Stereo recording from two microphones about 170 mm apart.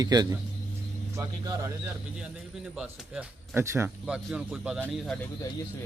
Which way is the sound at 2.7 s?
5° right (ahead or behind).